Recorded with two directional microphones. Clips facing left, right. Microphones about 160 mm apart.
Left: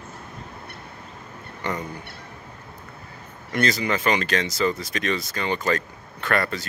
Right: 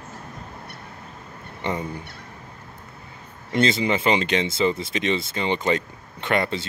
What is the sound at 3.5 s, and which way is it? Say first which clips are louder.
Speech: right 3 dB; 25° right (ahead or behind).